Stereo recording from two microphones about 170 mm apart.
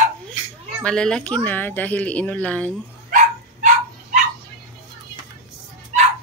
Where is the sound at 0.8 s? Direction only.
5° left (ahead or behind).